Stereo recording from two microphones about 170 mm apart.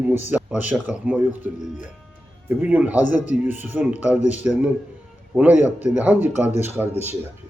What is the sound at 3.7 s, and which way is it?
Speech, 10° right (ahead or behind).